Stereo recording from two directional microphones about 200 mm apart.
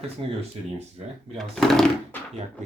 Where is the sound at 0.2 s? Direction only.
25° right (ahead or behind).